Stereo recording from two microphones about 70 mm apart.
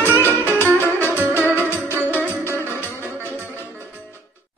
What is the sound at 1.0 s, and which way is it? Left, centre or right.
Music, left.